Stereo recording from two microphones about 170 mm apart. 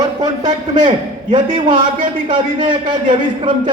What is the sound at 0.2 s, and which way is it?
A man's voice, 25° right (ahead or behind).